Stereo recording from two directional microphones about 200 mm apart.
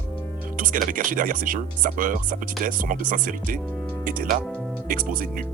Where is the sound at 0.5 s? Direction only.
40° right (ahead or behind).